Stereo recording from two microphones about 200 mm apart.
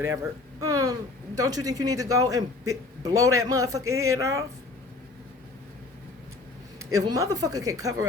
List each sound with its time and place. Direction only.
0.0 s a woman's voice: 15° right (ahead or behind)
7.0 s a woman's voice: 20° right (ahead or behind)